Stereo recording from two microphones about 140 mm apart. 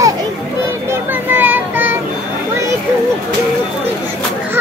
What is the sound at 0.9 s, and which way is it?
Child singing, 15° right (ahead or behind).